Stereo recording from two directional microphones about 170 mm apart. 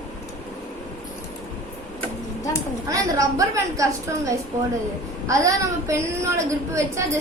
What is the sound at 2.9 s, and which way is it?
A woman's voice, 20° right (ahead or behind).